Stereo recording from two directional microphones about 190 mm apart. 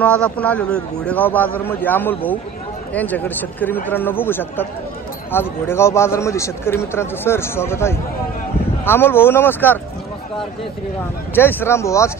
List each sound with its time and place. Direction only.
0.0 s a man's voice: 5° left (ahead or behind)
11.3 s a man's voice: 10° left (ahead or behind)